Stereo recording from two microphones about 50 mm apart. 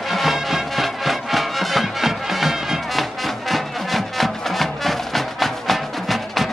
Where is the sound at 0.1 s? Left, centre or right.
Centre.